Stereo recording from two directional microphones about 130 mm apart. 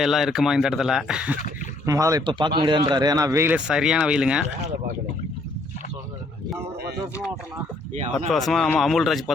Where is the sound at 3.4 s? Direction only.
10° right (ahead or behind).